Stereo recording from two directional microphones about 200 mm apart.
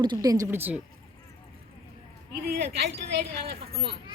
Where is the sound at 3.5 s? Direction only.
50° right (ahead or behind).